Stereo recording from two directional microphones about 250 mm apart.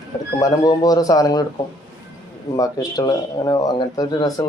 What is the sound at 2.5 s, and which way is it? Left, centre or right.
Speech, centre.